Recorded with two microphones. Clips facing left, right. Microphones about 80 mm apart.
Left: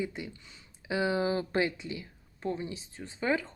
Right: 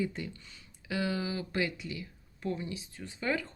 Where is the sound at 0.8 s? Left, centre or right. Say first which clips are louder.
Left 5 dB; left.